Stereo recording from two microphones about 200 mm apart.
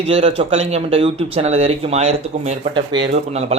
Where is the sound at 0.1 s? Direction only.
30° right (ahead or behind).